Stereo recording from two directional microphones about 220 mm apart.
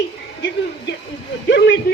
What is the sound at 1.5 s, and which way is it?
Speech, 50° left (ahead or behind).